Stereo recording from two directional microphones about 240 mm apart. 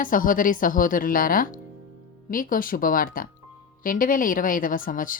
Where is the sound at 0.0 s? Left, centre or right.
Left.